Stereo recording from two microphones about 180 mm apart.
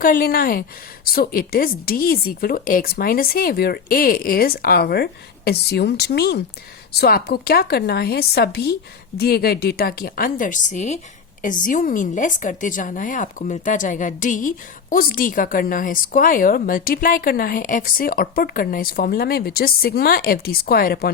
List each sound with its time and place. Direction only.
0.0 s a woman's voice: 50° left (ahead or behind)